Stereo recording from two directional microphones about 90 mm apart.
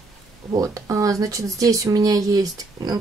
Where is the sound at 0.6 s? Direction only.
40° right (ahead or behind).